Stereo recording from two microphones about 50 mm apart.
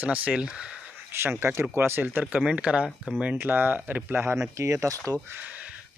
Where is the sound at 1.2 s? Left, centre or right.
Right.